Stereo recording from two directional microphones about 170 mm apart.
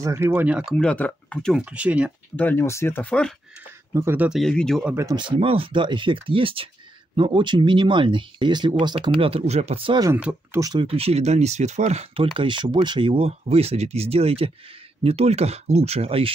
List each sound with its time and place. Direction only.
0.0 s speech: 15° right (ahead or behind)
0.7 s speech: 10° left (ahead or behind)
1.6 s speech: 5° right (ahead or behind)
2.3 s speech: 10° left (ahead or behind)
3.9 s speech: 15° right (ahead or behind)
4.4 s speech: 5° left (ahead or behind)
4.9 s speech: 25° right (ahead or behind)
10.0 s speech: 10° right (ahead or behind)
10.6 s speech: 25° right (ahead or behind)
12.4 s speech: 30° right (ahead or behind)